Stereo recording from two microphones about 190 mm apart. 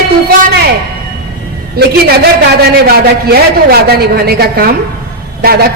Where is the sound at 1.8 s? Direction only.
55° right (ahead or behind).